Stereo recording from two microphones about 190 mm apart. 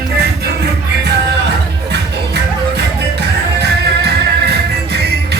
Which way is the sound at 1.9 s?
60° right (ahead or behind).